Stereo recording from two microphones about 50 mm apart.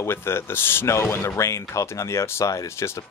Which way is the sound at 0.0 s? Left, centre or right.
Left.